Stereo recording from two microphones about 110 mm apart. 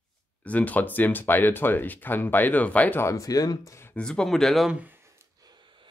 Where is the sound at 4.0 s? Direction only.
5° left (ahead or behind).